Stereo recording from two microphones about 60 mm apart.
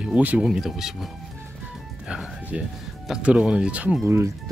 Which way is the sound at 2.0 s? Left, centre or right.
Centre.